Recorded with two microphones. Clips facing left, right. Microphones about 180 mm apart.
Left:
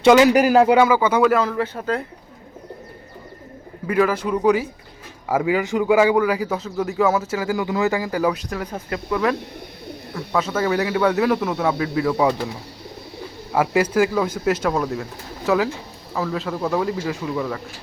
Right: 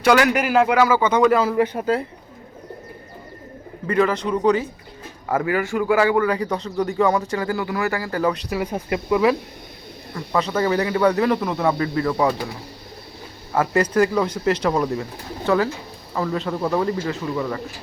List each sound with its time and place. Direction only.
0.0 s speech: 20° left (ahead or behind)
0.3 s speech: 35° left (ahead or behind)
0.9 s a man's voice: 10° left (ahead or behind)
1.5 s speech: 15° right (ahead or behind)
3.8 s a man's voice: 5° left (ahead or behind)
8.4 s speech: 10° right (ahead or behind)
10.2 s speech: 5° left (ahead or behind)
13.5 s speech: 10° left (ahead or behind)